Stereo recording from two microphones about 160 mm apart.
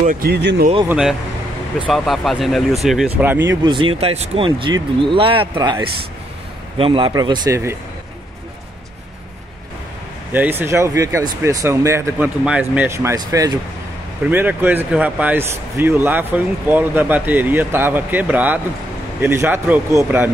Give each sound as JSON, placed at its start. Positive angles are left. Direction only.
{"t": 0.0, "sound": "speech", "side_deg": -55}
{"t": 0.3, "sound": "speech", "side_deg": -90}
{"t": 0.8, "sound": "speech", "side_deg": -5}
{"t": 3.2, "sound": "speech", "side_deg": -10}
{"t": 3.6, "sound": "speech", "side_deg": -30}
{"t": 10.3, "sound": "speech", "side_deg": -10}
{"t": 14.3, "sound": "speech", "side_deg": -10}